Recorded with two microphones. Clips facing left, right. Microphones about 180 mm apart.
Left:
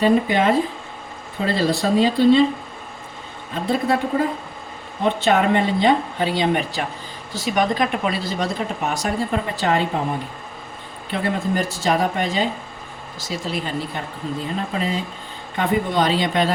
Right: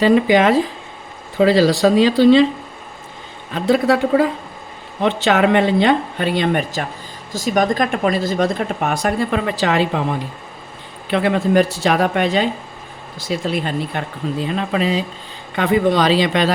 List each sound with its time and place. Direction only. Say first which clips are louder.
0.0 s speech: right 4 dB; 90° right
3.5 s a woman's voice: right 5 dB; 90° right; by 9.1 s 55° right (ahead or behind)
9.3 s speech: right 3 dB; 90° right
11.1 s speech: right 7 dB; 75° right (ahead or behind)
13.1 s speech: right 6 dB; 55° right (ahead or behind)
14.4 s speech: right 6 dB; 90° right